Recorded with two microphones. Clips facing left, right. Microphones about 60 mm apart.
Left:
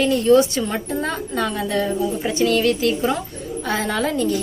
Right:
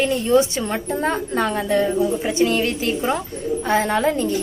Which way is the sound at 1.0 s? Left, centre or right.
Right.